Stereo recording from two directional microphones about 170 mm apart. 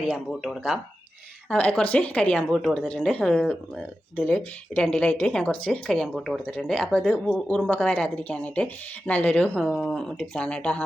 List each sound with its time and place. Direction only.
0.3 s a woman's voice: 5° right (ahead or behind)